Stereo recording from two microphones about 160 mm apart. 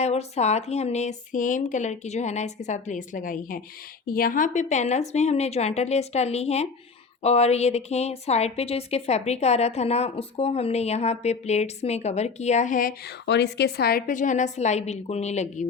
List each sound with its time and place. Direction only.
0.0 s a woman's voice: 45° left (ahead or behind)
13.2 s a woman's voice: 90° left; by 15.6 s 45° left (ahead or behind)